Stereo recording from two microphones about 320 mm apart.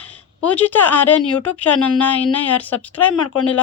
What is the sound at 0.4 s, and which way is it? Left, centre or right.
Speech, centre.